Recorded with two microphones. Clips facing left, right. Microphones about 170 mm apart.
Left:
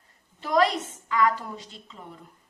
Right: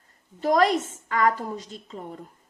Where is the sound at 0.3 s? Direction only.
45° right (ahead or behind).